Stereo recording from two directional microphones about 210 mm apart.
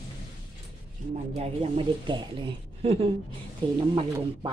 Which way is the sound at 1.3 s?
30° right (ahead or behind).